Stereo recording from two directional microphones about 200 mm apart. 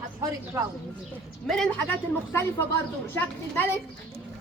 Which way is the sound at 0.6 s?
15° right (ahead or behind).